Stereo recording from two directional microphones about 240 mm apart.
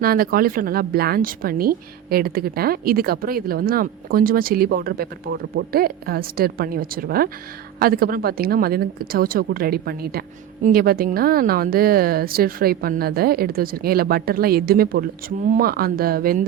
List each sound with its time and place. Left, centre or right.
0.0 s a woman's voice: right